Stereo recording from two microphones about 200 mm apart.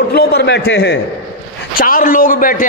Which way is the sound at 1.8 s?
45° left (ahead or behind).